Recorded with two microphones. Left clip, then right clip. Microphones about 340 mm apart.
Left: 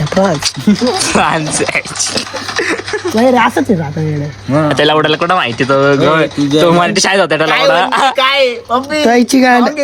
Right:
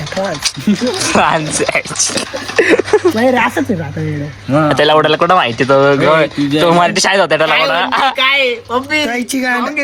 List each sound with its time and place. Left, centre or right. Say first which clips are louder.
0.1 s speech: left 6 dB; left
0.9 s speech: even; centre
2.6 s speech: right 6 dB; centre
3.2 s speech: left 3 dB; left
4.5 s speech: right 1 dB; centre